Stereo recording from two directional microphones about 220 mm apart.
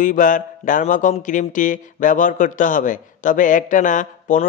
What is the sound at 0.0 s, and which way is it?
Mantra, 35° left (ahead or behind).